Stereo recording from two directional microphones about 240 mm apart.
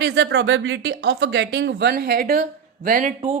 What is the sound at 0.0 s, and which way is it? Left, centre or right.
Speech, right.